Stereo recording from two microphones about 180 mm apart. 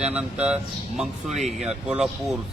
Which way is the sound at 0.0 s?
5° right (ahead or behind).